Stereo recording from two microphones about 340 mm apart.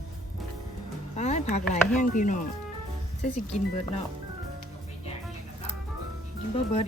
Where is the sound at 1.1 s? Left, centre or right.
Centre.